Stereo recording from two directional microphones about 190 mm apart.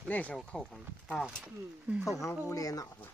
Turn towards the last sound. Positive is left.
turn(degrees=20)  # may be behind; listen again after turning